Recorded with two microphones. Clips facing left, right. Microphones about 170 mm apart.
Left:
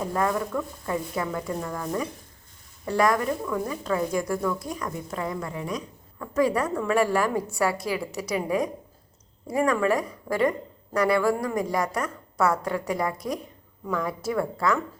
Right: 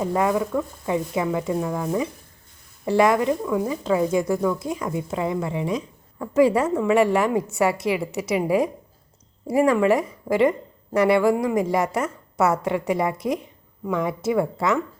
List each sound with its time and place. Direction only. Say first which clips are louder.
0.0 s speech: right 4 dB; 15° right (ahead or behind)
2.8 s a woman's voice: right 5 dB; 25° right (ahead or behind)